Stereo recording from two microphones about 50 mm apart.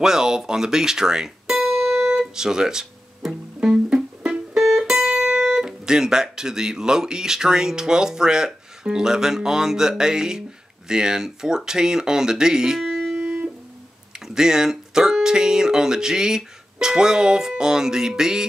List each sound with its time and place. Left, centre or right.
0.0 s music: centre
4.6 s speech: centre
13.2 s music: right
14.1 s speech: centre